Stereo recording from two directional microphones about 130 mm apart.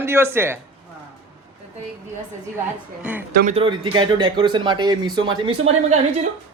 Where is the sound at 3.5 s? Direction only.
40° right (ahead or behind).